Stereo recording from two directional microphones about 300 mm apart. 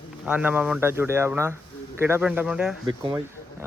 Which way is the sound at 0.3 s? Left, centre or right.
Centre.